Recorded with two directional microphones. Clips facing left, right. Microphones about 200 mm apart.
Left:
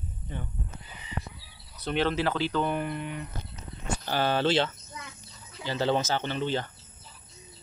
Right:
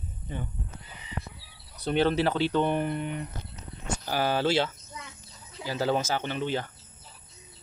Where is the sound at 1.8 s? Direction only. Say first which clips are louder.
Right 3 dB; 35° right (ahead or behind).